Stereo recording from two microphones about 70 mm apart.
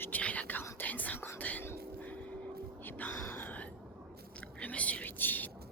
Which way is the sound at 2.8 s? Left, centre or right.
Left.